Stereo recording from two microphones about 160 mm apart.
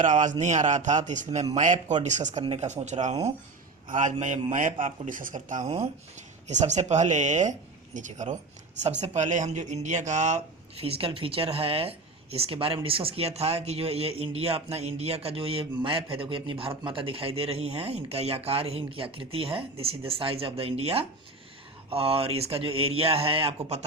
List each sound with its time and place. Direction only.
0.0 s speech: 50° right (ahead or behind)